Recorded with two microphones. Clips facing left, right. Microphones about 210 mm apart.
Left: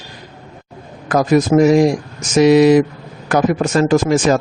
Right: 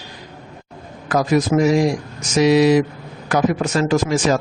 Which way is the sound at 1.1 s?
50° left (ahead or behind).